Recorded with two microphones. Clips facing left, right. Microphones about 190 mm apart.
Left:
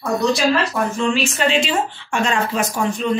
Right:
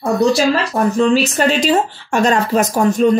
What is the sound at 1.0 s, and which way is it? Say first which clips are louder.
A woman's voice: right 7 dB; 40° right (ahead or behind).